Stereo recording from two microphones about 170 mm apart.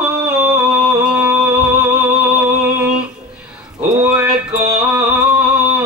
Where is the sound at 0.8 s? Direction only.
5° right (ahead or behind).